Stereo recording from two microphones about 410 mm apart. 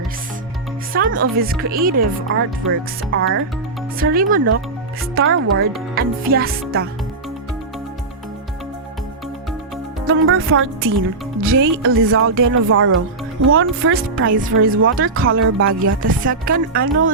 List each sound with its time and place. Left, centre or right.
0.9 s speech: right
10.1 s speech: right